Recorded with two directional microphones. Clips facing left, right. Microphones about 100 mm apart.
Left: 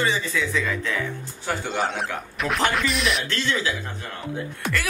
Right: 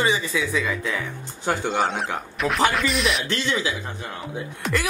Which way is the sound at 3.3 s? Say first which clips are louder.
Right 1 dB; 20° right (ahead or behind).